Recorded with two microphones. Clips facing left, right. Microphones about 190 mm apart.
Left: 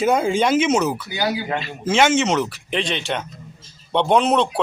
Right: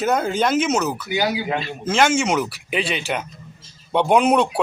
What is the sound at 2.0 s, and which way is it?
Speech, 10° right (ahead or behind).